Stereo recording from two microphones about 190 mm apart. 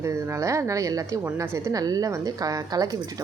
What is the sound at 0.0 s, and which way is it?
A woman's voice, 15° right (ahead or behind).